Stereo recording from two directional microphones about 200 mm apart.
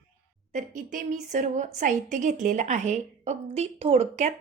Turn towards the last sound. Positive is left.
turn(degrees=-35)  # may be behind; listen again after turning